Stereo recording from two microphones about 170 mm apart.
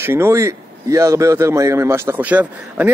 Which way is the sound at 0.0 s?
15° right (ahead or behind).